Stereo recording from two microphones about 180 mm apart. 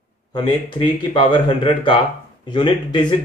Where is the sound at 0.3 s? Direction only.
25° left (ahead or behind).